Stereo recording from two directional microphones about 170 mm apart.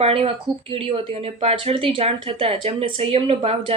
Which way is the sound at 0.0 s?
35° right (ahead or behind).